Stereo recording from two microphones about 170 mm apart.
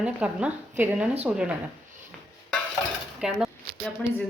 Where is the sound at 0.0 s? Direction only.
5° right (ahead or behind).